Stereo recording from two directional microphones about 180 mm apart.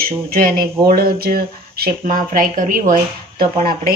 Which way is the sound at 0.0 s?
55° right (ahead or behind).